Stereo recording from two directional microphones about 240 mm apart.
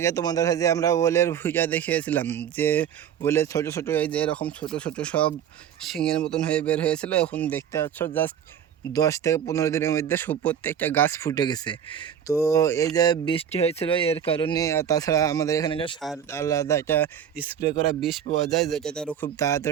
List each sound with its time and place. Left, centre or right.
0.0 s speech: centre
18.3 s speech: left
18.7 s speech: centre